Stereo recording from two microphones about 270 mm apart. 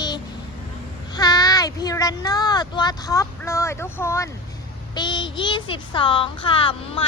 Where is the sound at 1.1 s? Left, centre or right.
Centre.